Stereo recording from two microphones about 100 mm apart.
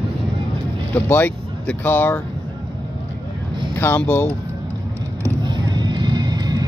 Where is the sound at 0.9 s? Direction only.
20° left (ahead or behind).